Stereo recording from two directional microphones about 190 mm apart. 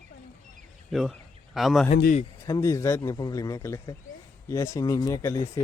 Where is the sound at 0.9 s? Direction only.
Centre (ahead or behind).